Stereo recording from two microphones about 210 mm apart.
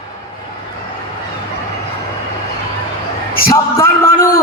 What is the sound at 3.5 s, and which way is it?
Speech, 15° left (ahead or behind).